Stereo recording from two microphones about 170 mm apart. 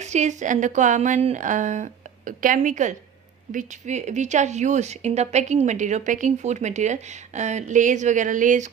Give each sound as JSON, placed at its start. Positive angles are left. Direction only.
{"t": 0.0, "sound": "speech", "side_deg": -45}